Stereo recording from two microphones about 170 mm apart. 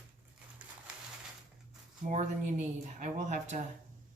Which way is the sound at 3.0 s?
45° right (ahead or behind).